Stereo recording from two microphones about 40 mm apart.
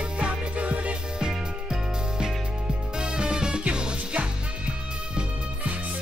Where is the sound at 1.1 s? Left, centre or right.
Right.